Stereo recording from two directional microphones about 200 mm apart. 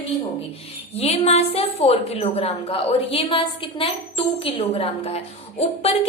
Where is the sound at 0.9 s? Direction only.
30° left (ahead or behind).